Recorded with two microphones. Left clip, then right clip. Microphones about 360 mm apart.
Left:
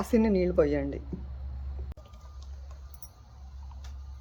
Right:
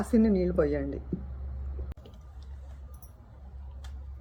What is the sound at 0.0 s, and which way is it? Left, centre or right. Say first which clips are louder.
Speech: left 1 dB; left.